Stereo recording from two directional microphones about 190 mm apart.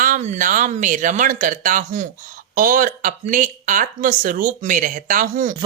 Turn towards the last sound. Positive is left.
turn(degrees=-45)  # may be behind; listen again after turning